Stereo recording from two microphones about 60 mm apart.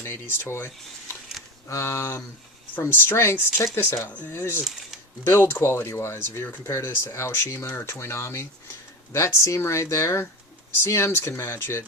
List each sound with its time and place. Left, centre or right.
0.0 s speech: left
2.7 s speech: left